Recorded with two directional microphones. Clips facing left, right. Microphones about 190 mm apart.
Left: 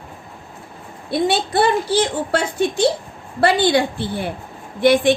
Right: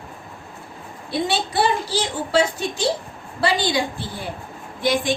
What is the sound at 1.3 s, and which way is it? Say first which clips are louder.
A woman's voice: left 3 dB; 55° left (ahead or behind).